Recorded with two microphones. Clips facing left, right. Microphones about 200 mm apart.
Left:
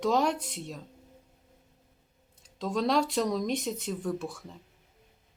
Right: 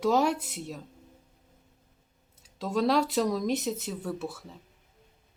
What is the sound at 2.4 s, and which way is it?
Speech, 5° right (ahead or behind).